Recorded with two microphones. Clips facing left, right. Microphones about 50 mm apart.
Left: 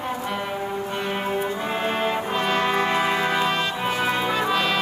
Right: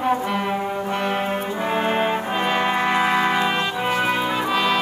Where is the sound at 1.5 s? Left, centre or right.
Right; by 4.8 s centre.